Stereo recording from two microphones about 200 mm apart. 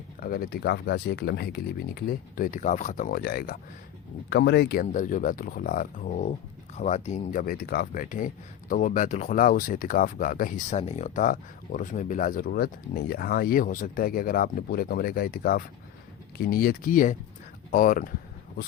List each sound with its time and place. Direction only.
0.2 s speech: 45° left (ahead or behind)
4.9 s speech: 40° left (ahead or behind)